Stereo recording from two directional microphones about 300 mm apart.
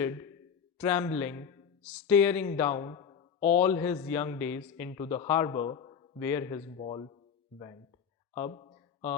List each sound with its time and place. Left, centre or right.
0.0 s a man's voice: centre
3.6 s a man's voice: centre
8.4 s a sound: centre